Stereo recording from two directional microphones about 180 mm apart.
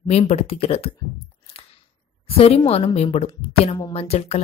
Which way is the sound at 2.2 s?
30° left (ahead or behind).